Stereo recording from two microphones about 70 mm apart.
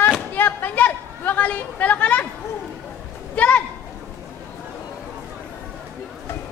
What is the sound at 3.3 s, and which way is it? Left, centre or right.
Speech, centre.